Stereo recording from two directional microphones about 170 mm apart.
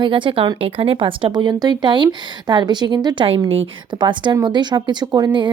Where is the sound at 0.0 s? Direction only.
30° right (ahead or behind).